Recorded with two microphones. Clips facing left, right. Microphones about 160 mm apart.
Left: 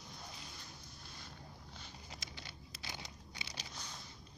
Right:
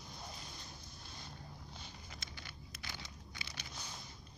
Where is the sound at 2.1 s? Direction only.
25° left (ahead or behind).